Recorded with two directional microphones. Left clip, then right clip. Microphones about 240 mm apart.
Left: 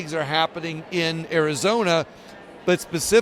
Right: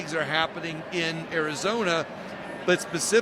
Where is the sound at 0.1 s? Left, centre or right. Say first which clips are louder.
Left 4 dB; left.